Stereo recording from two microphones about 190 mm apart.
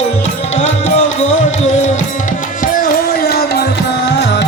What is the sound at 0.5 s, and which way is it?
Music, 35° left (ahead or behind).